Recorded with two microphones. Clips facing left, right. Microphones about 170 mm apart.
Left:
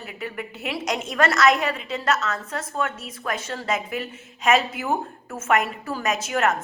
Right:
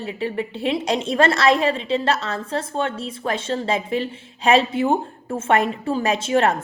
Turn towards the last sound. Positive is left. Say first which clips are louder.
# right 4 dB
turn(degrees=-30)  # may be behind; listen again after turning